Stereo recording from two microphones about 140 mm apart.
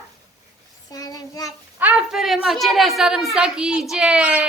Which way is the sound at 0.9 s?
25° left (ahead or behind).